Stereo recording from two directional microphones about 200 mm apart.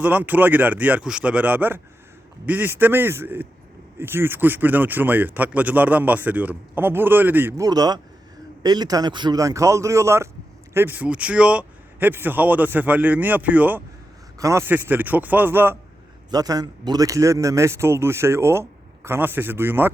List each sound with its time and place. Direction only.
0.0 s speech: 10° right (ahead or behind)